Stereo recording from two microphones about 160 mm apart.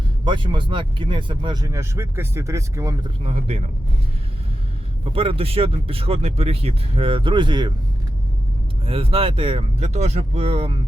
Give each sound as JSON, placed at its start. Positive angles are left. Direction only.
{"t": 0.3, "sound": "speech", "side_deg": -30}
{"t": 3.2, "sound": "speech", "side_deg": -40}
{"t": 5.0, "sound": "speech", "side_deg": -35}
{"t": 8.9, "sound": "speech", "side_deg": -35}